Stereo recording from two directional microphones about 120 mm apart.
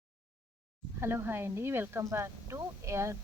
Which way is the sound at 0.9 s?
20° right (ahead or behind).